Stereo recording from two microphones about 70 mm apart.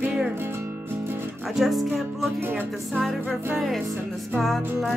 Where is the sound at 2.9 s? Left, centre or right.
Centre.